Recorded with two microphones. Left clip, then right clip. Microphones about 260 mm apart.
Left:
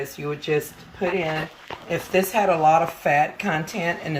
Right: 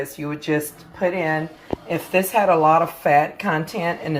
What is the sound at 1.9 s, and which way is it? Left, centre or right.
A woman's voice, centre.